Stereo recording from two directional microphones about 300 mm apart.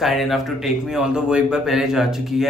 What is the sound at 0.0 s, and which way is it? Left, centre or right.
Speech, centre.